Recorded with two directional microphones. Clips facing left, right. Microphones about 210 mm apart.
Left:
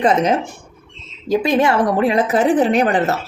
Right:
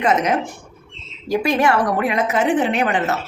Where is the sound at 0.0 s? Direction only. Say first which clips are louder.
Left 3 dB; 30° left (ahead or behind).